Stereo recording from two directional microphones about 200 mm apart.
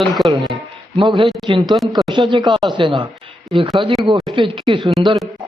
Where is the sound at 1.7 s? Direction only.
Centre (ahead or behind).